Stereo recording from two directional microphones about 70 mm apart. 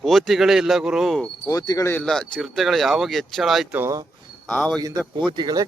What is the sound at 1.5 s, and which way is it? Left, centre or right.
Speech, left.